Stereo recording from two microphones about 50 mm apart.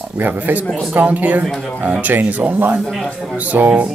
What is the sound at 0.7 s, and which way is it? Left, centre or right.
Speech, centre.